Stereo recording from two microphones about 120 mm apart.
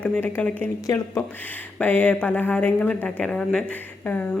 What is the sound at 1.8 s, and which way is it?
A woman's voice, 15° left (ahead or behind).